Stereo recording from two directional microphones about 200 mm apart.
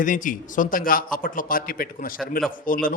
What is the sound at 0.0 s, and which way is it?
Speech, 40° left (ahead or behind).